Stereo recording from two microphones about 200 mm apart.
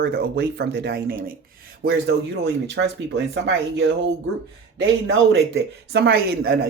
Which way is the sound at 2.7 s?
65° right (ahead or behind).